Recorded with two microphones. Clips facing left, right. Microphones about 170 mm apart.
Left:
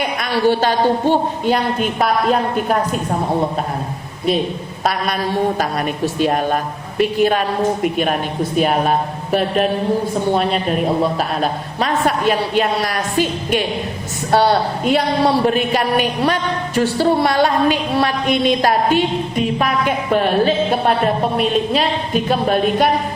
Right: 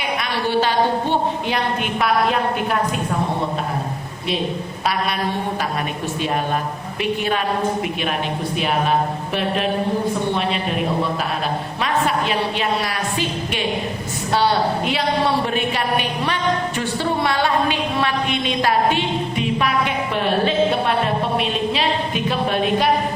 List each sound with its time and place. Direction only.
0.0 s a sound: 45° left (ahead or behind)
1.5 s a woman's voice: 40° left (ahead or behind)
6.2 s a woman's voice: 45° left (ahead or behind)
10.3 s a woman's voice: 45° left (ahead or behind)
11.8 s a woman's voice: 45° left (ahead or behind)